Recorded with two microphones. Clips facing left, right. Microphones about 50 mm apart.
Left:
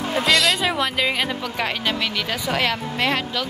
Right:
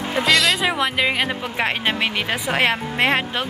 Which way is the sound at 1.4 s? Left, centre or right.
Right.